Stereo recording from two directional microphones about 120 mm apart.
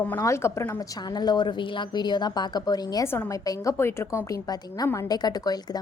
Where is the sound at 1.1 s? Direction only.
35° left (ahead or behind); by 4.2 s 20° left (ahead or behind).